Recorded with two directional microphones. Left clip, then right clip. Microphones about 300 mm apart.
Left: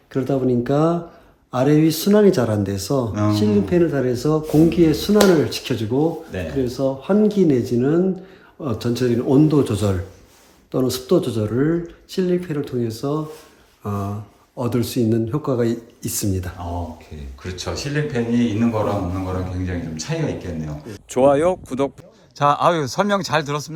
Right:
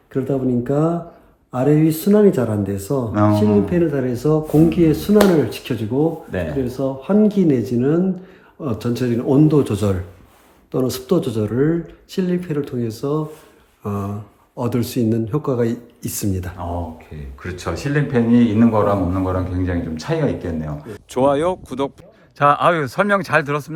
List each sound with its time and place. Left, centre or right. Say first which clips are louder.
0.1 s speech: even; centre
22.4 s speech: right 2 dB; centre